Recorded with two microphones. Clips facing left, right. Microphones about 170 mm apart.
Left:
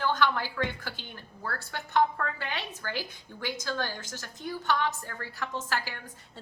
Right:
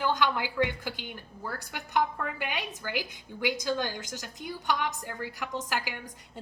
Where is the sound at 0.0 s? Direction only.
15° right (ahead or behind).